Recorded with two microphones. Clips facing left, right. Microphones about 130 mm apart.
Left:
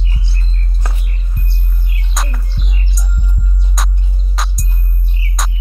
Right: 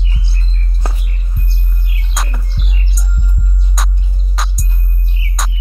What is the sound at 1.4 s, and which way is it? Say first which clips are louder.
Music: right 1 dB; centre (ahead or behind).